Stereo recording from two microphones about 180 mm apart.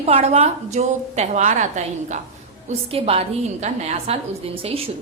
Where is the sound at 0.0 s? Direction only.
35° right (ahead or behind).